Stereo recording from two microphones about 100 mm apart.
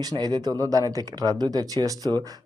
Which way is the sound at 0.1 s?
40° right (ahead or behind).